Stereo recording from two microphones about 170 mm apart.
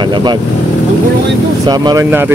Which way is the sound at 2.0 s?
10° right (ahead or behind).